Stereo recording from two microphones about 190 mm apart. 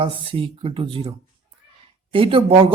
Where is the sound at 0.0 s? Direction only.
30° right (ahead or behind).